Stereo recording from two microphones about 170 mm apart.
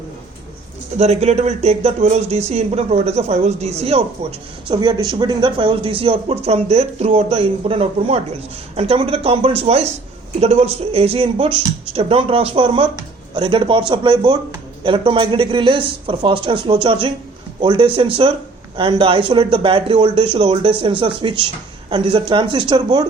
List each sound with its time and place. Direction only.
0.9 s speech: 40° right (ahead or behind); by 23.0 s 25° right (ahead or behind)